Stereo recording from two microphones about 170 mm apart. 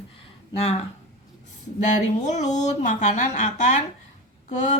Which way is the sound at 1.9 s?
45° left (ahead or behind).